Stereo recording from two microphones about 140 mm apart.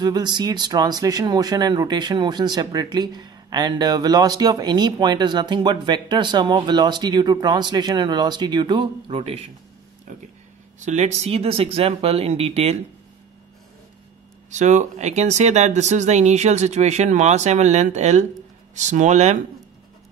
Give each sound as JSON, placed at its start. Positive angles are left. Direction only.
{"t": 0.0, "sound": "speech", "side_deg": -30}
{"t": 10.1, "sound": "speech", "side_deg": -60}
{"t": 14.5, "sound": "speech", "side_deg": -60}